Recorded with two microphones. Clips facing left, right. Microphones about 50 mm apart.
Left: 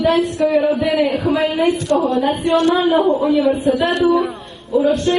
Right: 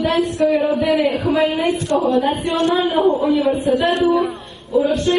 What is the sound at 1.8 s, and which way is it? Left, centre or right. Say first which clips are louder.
Speech: even; right.